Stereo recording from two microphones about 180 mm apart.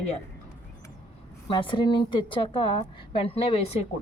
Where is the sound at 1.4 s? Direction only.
25° left (ahead or behind).